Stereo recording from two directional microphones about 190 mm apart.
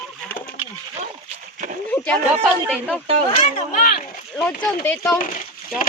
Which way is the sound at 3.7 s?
45° left (ahead or behind).